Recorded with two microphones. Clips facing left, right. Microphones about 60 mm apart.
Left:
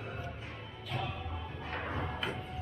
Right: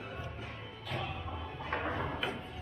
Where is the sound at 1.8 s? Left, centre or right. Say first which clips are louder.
Right 1 dB; centre.